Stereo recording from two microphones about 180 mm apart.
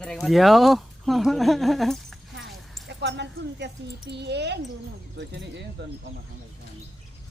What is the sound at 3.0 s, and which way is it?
Speech, 75° right (ahead or behind).